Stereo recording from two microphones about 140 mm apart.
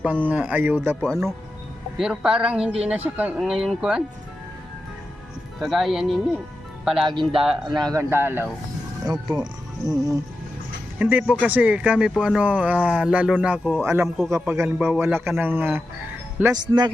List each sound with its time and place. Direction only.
0.0 s speech: 10° right (ahead or behind)
2.0 s speech: 5° right (ahead or behind)
5.5 s speech: centre (ahead or behind)
7.1 s a man's voice: 35° right (ahead or behind); by 8.4 s 15° right (ahead or behind)
9.3 s speech: 30° right (ahead or behind)
11.0 s speech: 10° right (ahead or behind)